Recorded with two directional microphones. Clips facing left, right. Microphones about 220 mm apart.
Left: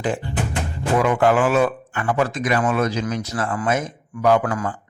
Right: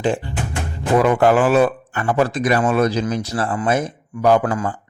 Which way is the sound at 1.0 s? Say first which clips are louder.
Right 2 dB; 35° right (ahead or behind).